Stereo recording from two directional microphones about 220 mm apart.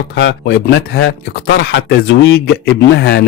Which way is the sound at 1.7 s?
50° left (ahead or behind).